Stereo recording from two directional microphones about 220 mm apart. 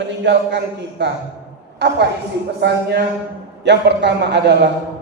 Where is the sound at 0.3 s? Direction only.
50° right (ahead or behind).